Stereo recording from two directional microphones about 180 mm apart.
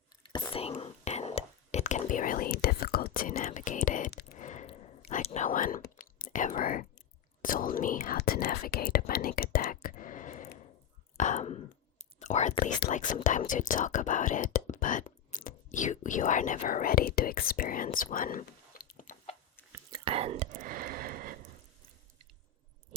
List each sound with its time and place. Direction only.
0.5 s whispering: 30° left (ahead or behind); by 4.4 s 60° left (ahead or behind)
4.4 s whispering: 40° left (ahead or behind)
6.1 s speech: 45° left (ahead or behind)
11.2 s whispering: 40° left (ahead or behind)
12.9 s speech: 45° left (ahead or behind)
19.9 s whispering: 30° right (ahead or behind)
20.6 s a sound: 50° right (ahead or behind)